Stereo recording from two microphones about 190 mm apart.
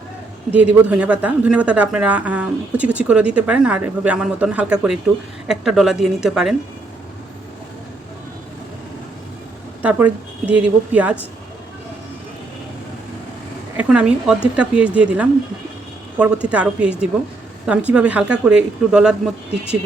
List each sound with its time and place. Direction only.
0.5 s a woman's voice: 5° right (ahead or behind)
9.8 s a woman's voice: 10° right (ahead or behind)
13.7 s speech: 5° right (ahead or behind)